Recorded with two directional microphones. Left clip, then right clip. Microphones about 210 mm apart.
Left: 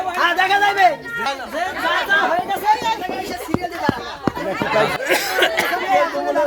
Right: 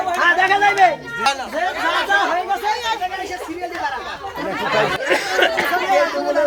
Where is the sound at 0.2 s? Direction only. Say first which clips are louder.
Right 1 dB; 50° left (ahead or behind).